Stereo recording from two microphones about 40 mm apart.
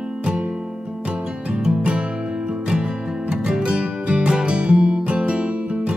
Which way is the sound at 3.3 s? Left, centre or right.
Centre.